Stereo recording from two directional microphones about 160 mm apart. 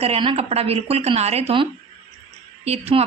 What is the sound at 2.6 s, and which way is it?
Speech, 40° right (ahead or behind).